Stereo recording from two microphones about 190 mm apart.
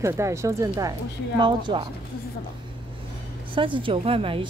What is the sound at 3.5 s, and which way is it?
Speech, 25° right (ahead or behind).